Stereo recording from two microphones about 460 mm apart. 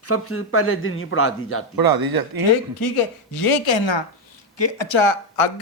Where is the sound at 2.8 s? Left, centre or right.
Left.